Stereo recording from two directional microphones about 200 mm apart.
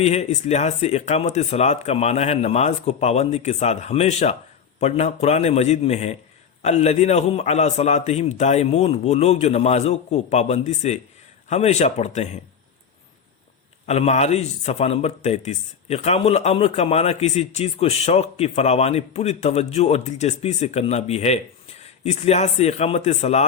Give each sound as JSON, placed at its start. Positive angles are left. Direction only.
{"t": 0.0, "sound": "a man's voice", "side_deg": 35}
{"t": 13.8, "sound": "a man's voice", "side_deg": 35}